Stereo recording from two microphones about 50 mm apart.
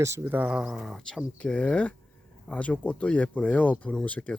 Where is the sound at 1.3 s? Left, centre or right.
Left.